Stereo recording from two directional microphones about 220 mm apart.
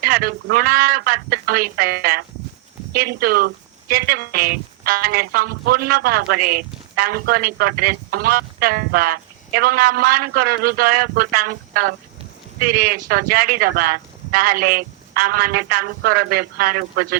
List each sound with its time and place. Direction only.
0.0 s speech: 45° right (ahead or behind)
12.5 s speech: 45° right (ahead or behind)